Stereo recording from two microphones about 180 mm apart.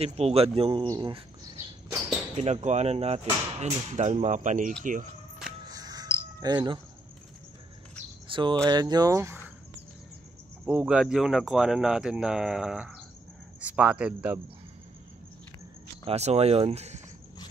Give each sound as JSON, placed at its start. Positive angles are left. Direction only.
{"t": 0.0, "sound": "speech", "side_deg": -35}
{"t": 2.3, "sound": "speech", "side_deg": -40}
{"t": 5.7, "sound": "music", "side_deg": -20}
{"t": 8.3, "sound": "speech", "side_deg": -25}
{"t": 10.6, "sound": "speech", "side_deg": -5}
{"t": 16.1, "sound": "speech", "side_deg": -35}